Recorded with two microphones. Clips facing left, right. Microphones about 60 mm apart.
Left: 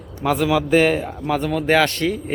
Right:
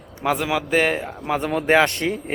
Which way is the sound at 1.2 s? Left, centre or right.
Right.